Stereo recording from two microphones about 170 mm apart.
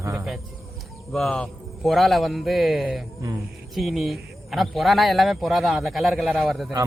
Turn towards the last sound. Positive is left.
turn(degrees=0)  # may be behind; listen again after turning